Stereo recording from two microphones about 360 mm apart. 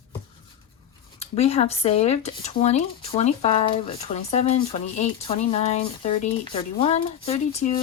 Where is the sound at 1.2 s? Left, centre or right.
Centre.